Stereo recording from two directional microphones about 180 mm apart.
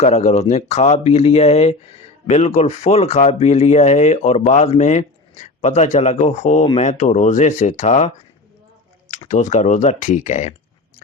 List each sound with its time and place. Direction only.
0.0 s speech: 35° left (ahead or behind)